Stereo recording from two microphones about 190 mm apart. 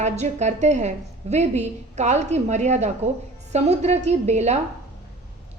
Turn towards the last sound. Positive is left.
turn(degrees=-35)  # may be behind; listen again after turning